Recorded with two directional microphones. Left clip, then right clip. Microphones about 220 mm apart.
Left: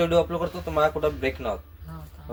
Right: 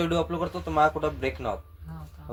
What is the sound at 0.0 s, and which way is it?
Speech, 20° right (ahead or behind).